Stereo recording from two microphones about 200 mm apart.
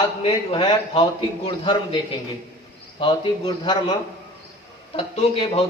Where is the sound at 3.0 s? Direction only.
20° left (ahead or behind).